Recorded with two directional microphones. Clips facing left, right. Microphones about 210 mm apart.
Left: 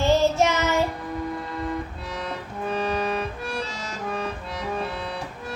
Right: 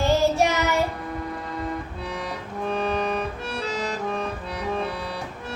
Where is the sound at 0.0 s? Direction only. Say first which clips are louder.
Even; 15° right (ahead or behind).